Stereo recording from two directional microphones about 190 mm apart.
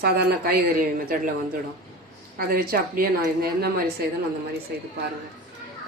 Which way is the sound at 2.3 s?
50° right (ahead or behind).